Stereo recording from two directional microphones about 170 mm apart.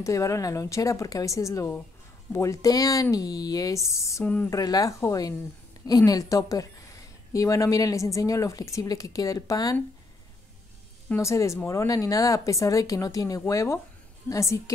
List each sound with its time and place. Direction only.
0.0 s speech: 20° left (ahead or behind)
4.6 s speech: 20° left (ahead or behind)
11.1 s a woman's voice: 15° left (ahead or behind)